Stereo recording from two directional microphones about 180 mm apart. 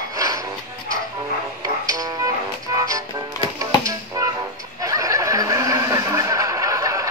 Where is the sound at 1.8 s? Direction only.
20° right (ahead or behind).